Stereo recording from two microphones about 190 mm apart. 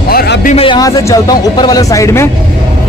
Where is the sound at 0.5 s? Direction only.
25° left (ahead or behind).